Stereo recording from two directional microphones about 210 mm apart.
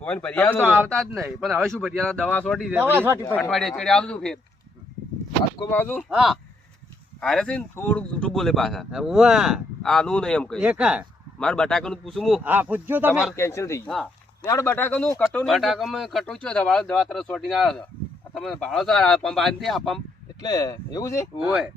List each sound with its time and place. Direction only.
0.0 s speech: 5° left (ahead or behind)
2.7 s speech: 10° right (ahead or behind)
3.2 s speech: 10° left (ahead or behind)
5.7 s speech: 10° left (ahead or behind)
6.1 s speech: centre (ahead or behind)
13.3 s speech: 15° left (ahead or behind)
20.4 s speech: 15° left (ahead or behind)